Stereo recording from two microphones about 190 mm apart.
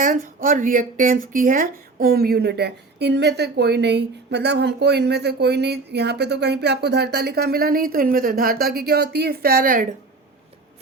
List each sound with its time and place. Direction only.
0.0 s speech: 45° right (ahead or behind)